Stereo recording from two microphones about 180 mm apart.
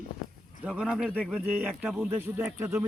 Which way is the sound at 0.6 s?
5° right (ahead or behind).